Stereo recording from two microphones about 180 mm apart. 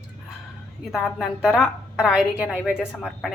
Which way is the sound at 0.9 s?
Centre (ahead or behind).